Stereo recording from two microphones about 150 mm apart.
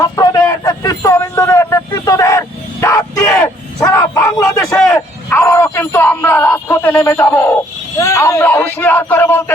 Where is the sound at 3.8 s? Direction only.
20° left (ahead or behind).